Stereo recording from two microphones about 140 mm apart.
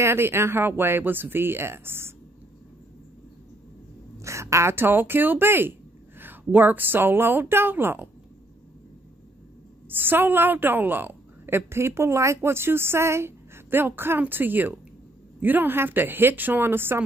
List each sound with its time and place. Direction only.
0.0 s a woman's voice: 20° right (ahead or behind)
4.2 s speech: 20° right (ahead or behind)
9.8 s a woman's voice: 15° right (ahead or behind)